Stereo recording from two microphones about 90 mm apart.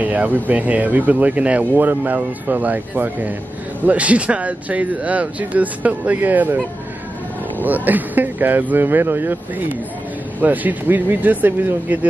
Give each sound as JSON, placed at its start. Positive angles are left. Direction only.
{"t": 0.0, "sound": "speech", "side_deg": -15}
{"t": 7.6, "sound": "speech", "side_deg": -20}